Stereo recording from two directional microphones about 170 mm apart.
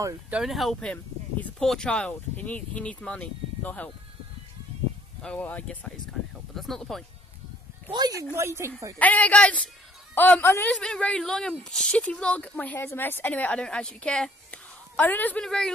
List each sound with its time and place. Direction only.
0.3 s speech: centre (ahead or behind)
5.2 s speech: 10° left (ahead or behind)
7.9 s speech: 20° right (ahead or behind)
8.9 s speech: 10° left (ahead or behind)